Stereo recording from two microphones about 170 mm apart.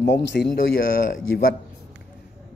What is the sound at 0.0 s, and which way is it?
Speech, 90° left.